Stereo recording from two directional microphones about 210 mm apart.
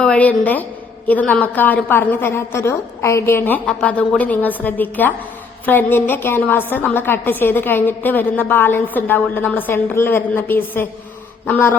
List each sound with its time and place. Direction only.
0.0 s a woman's voice: 5° left (ahead or behind)